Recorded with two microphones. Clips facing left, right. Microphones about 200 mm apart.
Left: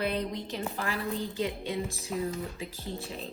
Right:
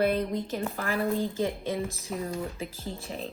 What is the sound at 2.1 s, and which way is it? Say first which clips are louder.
Speech: left 2 dB; centre (ahead or behind).